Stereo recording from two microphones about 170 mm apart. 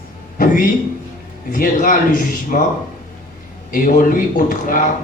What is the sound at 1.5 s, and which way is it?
A man's voice, 50° left (ahead or behind).